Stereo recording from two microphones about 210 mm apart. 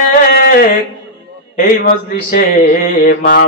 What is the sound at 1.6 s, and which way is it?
Speech, 40° left (ahead or behind).